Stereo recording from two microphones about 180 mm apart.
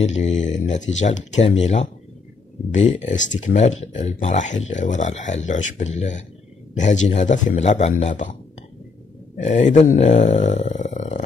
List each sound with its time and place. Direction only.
0.0 s speech: 40° left (ahead or behind)
9.4 s speech: 40° left (ahead or behind)